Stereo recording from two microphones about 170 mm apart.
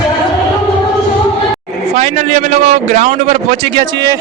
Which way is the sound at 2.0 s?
40° right (ahead or behind).